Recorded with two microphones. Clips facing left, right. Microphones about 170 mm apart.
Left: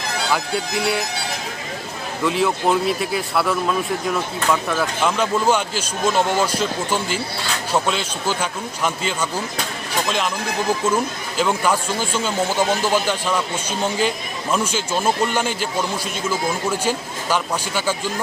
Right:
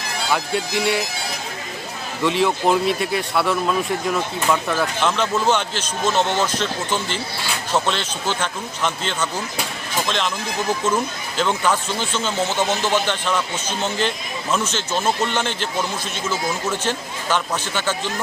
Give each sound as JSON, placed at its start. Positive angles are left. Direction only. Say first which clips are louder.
{"t": 0.3, "sound": "speech", "louder": "right 2 dB", "side_deg": 0}
{"t": 2.2, "sound": "speech", "louder": "right 1 dB", "side_deg": 0}